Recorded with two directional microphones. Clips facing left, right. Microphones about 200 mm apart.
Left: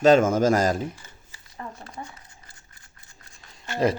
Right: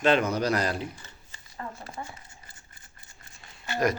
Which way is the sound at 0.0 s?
45° left (ahead or behind).